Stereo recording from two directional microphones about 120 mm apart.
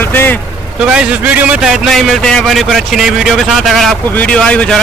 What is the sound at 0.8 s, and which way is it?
A man's voice, 10° right (ahead or behind).